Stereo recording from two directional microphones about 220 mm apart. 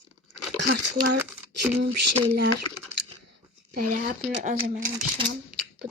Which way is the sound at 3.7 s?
40° right (ahead or behind).